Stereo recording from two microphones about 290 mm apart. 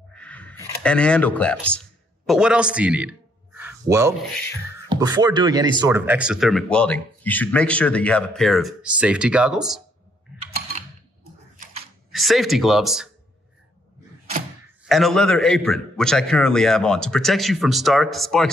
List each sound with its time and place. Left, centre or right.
0.1 s a sound: centre
2.2 s a man's voice: centre
12.1 s speech: centre
14.9 s speech: centre